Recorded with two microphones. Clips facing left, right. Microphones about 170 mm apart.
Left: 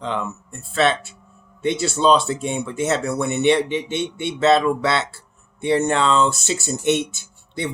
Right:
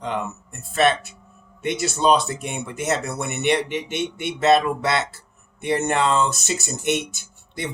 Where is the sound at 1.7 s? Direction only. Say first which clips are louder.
Left 2 dB; 20° right (ahead or behind).